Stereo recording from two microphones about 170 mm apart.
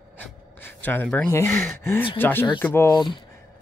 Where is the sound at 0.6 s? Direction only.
10° left (ahead or behind).